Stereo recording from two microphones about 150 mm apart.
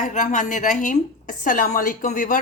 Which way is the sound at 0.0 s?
55° left (ahead or behind).